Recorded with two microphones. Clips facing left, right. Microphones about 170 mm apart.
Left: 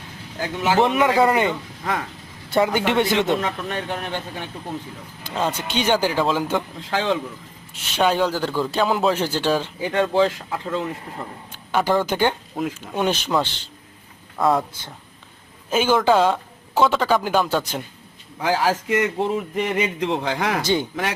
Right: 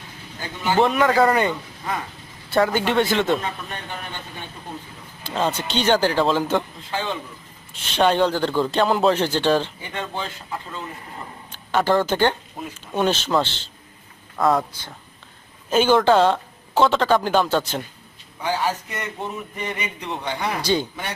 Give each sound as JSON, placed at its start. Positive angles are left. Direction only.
{"t": 0.4, "sound": "a man's voice", "side_deg": 90}
{"t": 0.9, "sound": "speech", "side_deg": 15}
{"t": 1.1, "sound": "a man's voice", "side_deg": 5}
{"t": 2.5, "sound": "speech", "side_deg": 20}
{"t": 3.4, "sound": "speech", "side_deg": 80}
{"t": 5.3, "sound": "speech", "side_deg": 10}
{"t": 6.9, "sound": "a man's voice", "side_deg": 90}
{"t": 7.7, "sound": "speech", "side_deg": 10}
{"t": 9.8, "sound": "a man's voice", "side_deg": 85}
{"t": 11.5, "sound": "a man's voice", "side_deg": 10}
{"t": 15.7, "sound": "speech", "side_deg": 5}
{"t": 18.4, "sound": "a man's voice", "side_deg": 90}
{"t": 20.6, "sound": "speech", "side_deg": 20}